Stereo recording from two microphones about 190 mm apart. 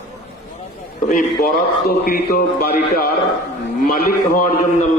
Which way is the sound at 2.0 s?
50° left (ahead or behind).